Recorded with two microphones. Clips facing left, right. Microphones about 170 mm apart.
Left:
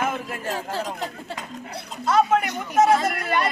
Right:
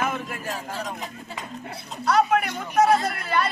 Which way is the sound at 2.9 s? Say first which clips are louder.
Left 1 dB; 90° left.